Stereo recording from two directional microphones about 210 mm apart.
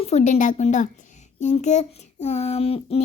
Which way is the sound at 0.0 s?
35° left (ahead or behind).